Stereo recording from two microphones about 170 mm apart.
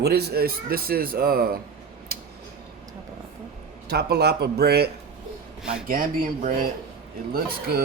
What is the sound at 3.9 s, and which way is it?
Speech, 75° right (ahead or behind).